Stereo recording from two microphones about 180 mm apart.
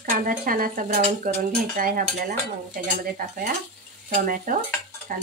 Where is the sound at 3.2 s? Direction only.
50° right (ahead or behind).